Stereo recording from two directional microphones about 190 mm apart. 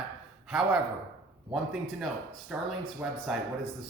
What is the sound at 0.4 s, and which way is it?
A man's voice, centre (ahead or behind).